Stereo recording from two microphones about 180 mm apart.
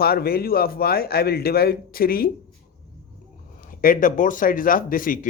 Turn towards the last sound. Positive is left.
turn(degrees=50)  # may be behind; listen again after turning